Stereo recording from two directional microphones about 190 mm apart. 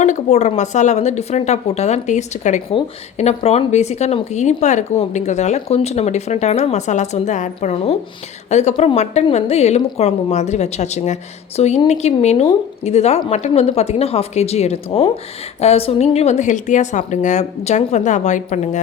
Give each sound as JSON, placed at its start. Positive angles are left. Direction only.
{"t": 0.0, "sound": "speech", "side_deg": 40}